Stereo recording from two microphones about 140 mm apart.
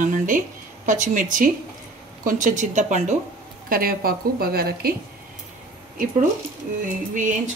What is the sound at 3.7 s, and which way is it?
A woman's voice, 90° right.